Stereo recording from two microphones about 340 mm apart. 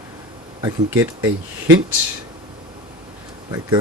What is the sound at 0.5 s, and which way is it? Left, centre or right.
Speech, centre.